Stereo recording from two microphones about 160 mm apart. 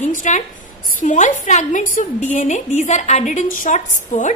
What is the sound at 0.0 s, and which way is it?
A woman's voice, 50° left (ahead or behind).